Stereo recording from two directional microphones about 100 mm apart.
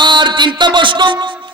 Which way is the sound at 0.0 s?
50° right (ahead or behind).